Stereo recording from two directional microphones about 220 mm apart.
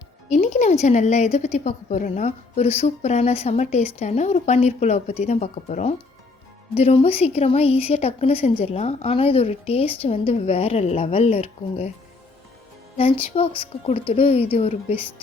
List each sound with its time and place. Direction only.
0.3 s a woman's voice: 30° left (ahead or behind)
13.0 s a woman's voice: 25° left (ahead or behind)